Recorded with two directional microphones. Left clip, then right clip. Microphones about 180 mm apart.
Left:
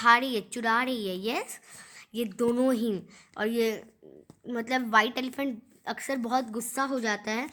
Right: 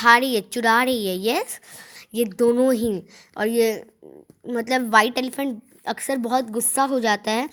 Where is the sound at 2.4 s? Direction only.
20° right (ahead or behind).